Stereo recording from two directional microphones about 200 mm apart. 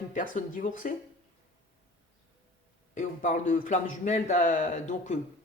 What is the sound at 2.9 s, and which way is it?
A man's voice, 40° left (ahead or behind).